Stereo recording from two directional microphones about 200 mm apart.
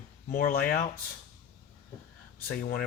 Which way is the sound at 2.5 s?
50° left (ahead or behind).